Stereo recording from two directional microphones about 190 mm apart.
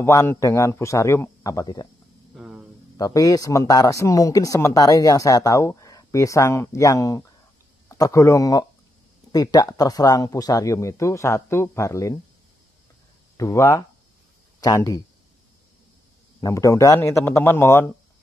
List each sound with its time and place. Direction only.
0.0 s speech: 15° left (ahead or behind)
2.3 s hum: 5° right (ahead or behind)
3.0 s speech: 15° left (ahead or behind)
13.4 s speech: 15° left (ahead or behind)
16.3 s speech: 15° left (ahead or behind)